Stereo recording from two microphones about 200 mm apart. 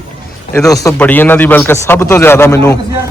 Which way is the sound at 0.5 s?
15° left (ahead or behind).